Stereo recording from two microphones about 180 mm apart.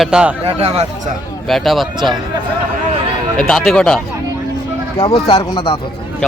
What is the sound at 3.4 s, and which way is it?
Speech, 5° left (ahead or behind).